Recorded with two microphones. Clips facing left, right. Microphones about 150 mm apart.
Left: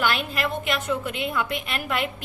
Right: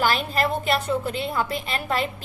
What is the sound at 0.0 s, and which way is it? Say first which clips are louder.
A woman's voice: right 3 dB; 35° right (ahead or behind).